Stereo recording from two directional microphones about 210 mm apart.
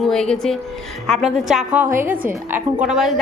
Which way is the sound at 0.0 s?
Centre (ahead or behind).